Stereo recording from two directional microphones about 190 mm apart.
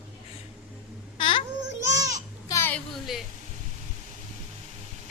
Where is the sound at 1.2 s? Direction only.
25° left (ahead or behind).